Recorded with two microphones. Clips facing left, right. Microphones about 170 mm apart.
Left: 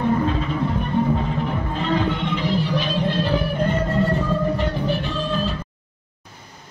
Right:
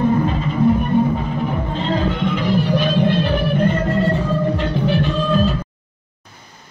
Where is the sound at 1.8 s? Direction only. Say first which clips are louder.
Right 2 dB; 45° right (ahead or behind).